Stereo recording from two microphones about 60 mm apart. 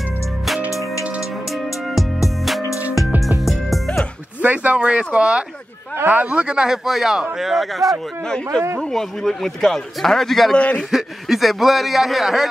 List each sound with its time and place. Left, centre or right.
0.7 s music: left
3.4 s music: centre
4.4 s speech: right
4.7 s speech: centre
6.0 s speech: right
6.4 s speech: centre
6.9 s a man's voice: centre
8.9 s a man's voice: centre